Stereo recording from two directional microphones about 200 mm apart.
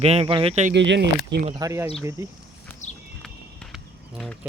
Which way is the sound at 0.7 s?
60° right (ahead or behind).